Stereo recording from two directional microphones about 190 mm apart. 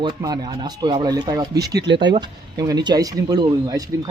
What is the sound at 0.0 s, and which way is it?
Speech, 20° right (ahead or behind).